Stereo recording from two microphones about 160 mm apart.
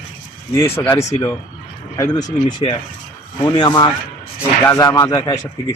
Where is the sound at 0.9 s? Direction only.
15° left (ahead or behind).